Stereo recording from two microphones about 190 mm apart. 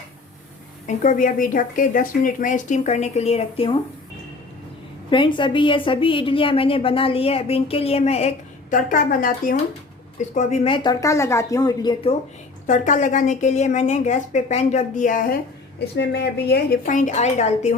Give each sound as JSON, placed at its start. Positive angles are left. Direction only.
{"t": 0.9, "sound": "a woman's voice", "side_deg": 45}
{"t": 5.1, "sound": "a woman's voice", "side_deg": 25}
{"t": 8.7, "sound": "a woman's voice", "side_deg": 45}
{"t": 10.3, "sound": "a woman's voice", "side_deg": 35}
{"t": 10.8, "sound": "a woman's voice", "side_deg": 15}
{"t": 12.6, "sound": "a woman's voice", "side_deg": 40}
{"t": 16.0, "sound": "speech", "side_deg": 60}
{"t": 16.9, "sound": "a woman's voice", "side_deg": 40}